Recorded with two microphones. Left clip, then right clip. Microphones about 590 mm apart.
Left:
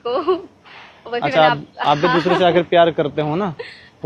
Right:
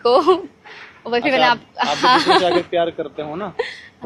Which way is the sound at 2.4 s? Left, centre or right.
Left.